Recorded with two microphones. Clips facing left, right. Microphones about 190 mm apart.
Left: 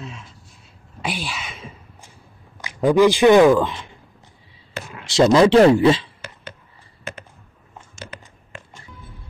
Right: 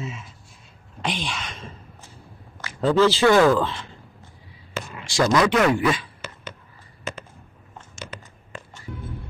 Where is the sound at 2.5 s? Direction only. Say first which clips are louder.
Left 3 dB; 15° left (ahead or behind).